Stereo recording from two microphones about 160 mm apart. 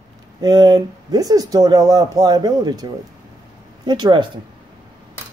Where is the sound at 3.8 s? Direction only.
30° right (ahead or behind).